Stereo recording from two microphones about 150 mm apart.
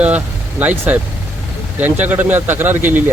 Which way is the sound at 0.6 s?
10° right (ahead or behind).